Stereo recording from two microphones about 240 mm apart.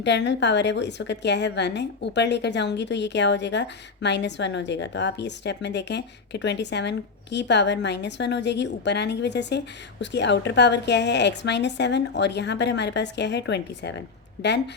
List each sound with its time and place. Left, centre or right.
0.0 s a woman's voice: left